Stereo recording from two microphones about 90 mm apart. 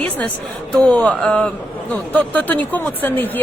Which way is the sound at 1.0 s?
Centre (ahead or behind).